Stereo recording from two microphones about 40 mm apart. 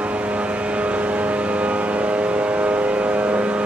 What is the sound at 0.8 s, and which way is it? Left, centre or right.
Vehicle, right.